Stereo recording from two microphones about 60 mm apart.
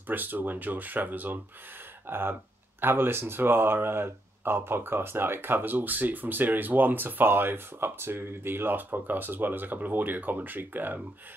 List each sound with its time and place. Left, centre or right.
0.0 s speech: right